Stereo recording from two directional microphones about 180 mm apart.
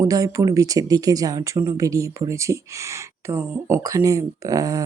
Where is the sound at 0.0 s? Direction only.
20° right (ahead or behind).